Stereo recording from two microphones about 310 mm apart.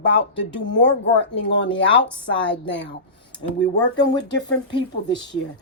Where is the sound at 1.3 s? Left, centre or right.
Left.